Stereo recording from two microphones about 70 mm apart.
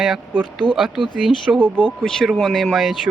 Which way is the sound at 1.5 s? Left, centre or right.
Right.